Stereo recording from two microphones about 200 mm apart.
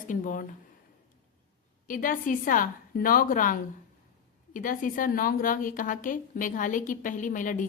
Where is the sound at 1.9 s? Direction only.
45° left (ahead or behind).